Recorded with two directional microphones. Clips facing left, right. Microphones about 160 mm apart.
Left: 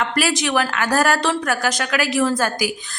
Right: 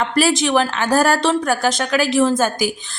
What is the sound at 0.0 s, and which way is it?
A woman's voice, 25° right (ahead or behind).